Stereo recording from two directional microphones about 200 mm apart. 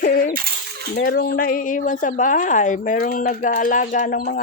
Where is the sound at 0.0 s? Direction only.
45° left (ahead or behind).